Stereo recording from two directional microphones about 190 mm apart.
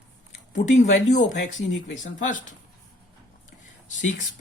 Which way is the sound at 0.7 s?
40° left (ahead or behind).